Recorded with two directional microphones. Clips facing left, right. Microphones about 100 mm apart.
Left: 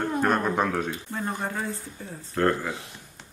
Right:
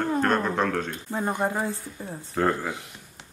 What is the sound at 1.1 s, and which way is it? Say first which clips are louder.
Speech: right 6 dB; 20° right (ahead or behind).